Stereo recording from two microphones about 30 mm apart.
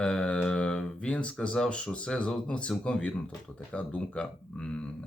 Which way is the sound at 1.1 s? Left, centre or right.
Left.